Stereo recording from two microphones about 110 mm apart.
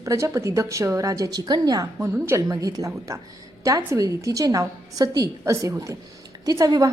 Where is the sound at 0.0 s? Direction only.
30° right (ahead or behind).